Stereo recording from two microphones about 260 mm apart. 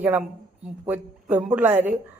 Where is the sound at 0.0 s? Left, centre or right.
Centre.